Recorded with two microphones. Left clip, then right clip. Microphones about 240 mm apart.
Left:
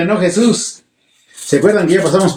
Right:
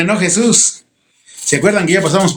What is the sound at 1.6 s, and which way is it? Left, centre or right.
Speech, right.